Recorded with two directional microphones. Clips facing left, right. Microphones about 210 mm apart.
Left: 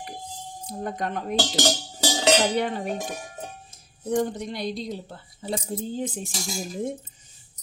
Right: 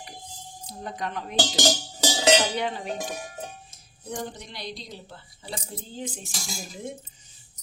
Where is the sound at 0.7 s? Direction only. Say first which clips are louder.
Left 4 dB; 50° left (ahead or behind).